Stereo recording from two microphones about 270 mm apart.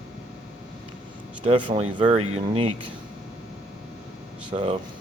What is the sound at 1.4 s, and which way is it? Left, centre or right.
Speech, centre.